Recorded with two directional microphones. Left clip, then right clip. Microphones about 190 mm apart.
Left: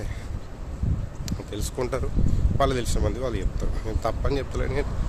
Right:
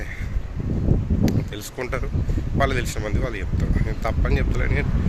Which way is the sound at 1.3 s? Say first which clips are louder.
Right 3 dB; 20° left (ahead or behind).